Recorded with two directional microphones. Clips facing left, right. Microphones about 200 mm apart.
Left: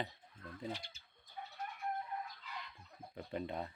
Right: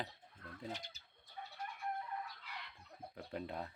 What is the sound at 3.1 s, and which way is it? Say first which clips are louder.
Speech: left 3 dB; centre (ahead or behind).